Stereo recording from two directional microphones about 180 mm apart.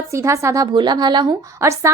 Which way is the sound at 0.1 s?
15° right (ahead or behind).